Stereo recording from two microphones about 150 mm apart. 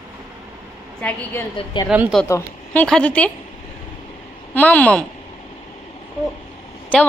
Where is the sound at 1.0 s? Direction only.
10° left (ahead or behind).